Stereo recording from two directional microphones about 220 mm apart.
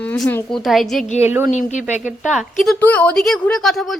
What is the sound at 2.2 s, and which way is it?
A woman's voice, centre (ahead or behind).